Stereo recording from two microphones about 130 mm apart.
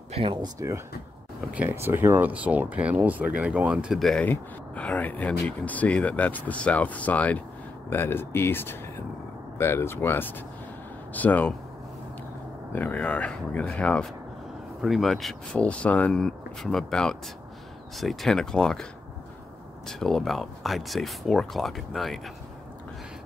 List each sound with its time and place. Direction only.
0.1 s speech: 40° right (ahead or behind)
1.5 s speech: 15° right (ahead or behind); by 11.5 s 10° left (ahead or behind)
12.7 s speech: 10° left (ahead or behind)
19.9 s speech: 5° left (ahead or behind)